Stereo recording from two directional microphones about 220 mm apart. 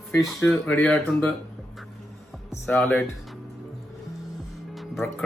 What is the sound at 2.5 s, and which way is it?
Speech, 5° left (ahead or behind).